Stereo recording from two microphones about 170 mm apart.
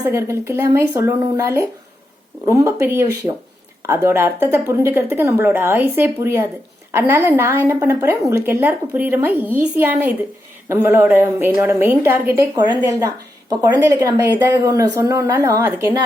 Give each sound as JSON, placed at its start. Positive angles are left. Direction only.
{"t": 0.1, "sound": "a woman's voice", "side_deg": -15}
{"t": 12.5, "sound": "speech", "side_deg": -25}